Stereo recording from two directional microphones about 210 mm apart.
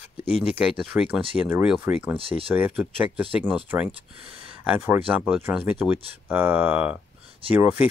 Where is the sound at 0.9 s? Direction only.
Centre (ahead or behind).